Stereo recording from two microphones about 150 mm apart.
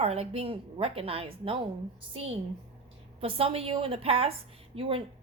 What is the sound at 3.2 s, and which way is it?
A woman's voice, 40° right (ahead or behind).